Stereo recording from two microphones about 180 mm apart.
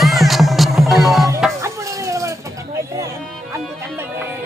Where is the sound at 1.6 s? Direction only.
15° right (ahead or behind).